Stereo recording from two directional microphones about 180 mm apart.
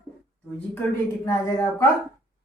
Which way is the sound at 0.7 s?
15° left (ahead or behind).